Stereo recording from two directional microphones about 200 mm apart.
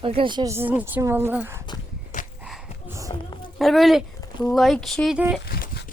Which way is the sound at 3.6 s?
Centre (ahead or behind).